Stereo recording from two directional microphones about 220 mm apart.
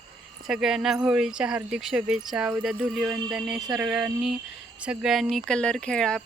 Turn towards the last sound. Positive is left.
turn(degrees=5)  # may be behind; listen again after turning